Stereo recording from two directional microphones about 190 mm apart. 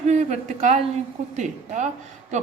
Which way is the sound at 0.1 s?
35° right (ahead or behind).